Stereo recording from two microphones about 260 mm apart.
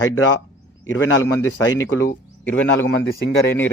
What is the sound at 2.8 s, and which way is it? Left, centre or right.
Speech, left.